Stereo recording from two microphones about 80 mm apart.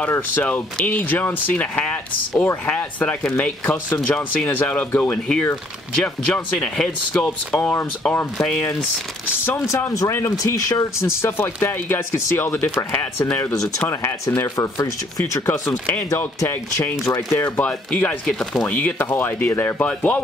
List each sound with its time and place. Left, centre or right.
0.1 s speech: left; by 8.6 s centre
9.3 s speech: left
11.1 s speech: left
13.5 s speech: left
17.0 s speech: left
17.4 s speech: centre
18.7 s speech: centre